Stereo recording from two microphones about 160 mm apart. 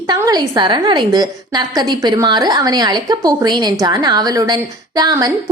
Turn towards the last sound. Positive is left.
turn(degrees=-25)  # may be behind; listen again after turning